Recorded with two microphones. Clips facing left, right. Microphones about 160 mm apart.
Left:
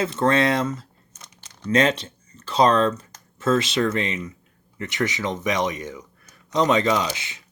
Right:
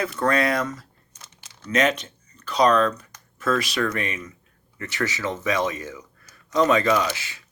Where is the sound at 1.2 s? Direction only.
5° right (ahead or behind).